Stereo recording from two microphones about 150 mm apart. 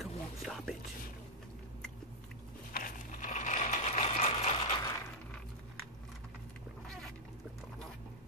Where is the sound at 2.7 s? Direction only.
65° left (ahead or behind); by 4.7 s 40° left (ahead or behind).